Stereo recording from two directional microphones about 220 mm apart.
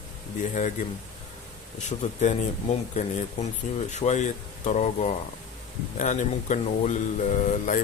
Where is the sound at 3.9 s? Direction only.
30° left (ahead or behind).